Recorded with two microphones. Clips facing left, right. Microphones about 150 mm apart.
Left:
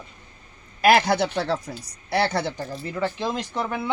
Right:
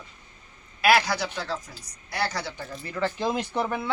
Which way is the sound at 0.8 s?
50° left (ahead or behind).